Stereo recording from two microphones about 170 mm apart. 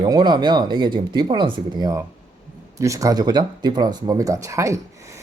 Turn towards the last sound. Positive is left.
turn(degrees=-15)  # may be behind; listen again after turning